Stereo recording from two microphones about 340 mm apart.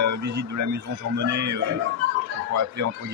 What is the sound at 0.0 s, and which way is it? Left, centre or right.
A man's voice, right.